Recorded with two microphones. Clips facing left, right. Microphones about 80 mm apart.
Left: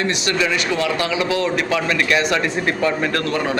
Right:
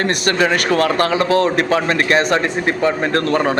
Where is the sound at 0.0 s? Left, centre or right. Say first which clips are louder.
Right 4 dB; right.